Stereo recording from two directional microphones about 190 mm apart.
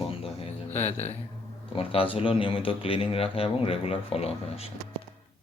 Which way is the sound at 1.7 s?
30° left (ahead or behind).